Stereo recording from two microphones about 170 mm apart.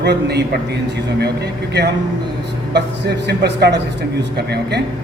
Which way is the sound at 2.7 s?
80° right.